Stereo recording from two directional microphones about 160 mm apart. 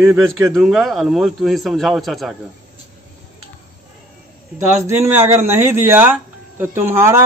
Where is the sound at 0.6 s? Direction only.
Centre (ahead or behind).